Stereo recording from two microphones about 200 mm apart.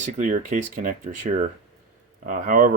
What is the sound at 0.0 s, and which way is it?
Speech, 35° right (ahead or behind).